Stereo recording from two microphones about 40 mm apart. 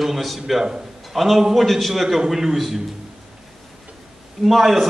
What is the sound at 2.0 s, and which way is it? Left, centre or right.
Speech, centre.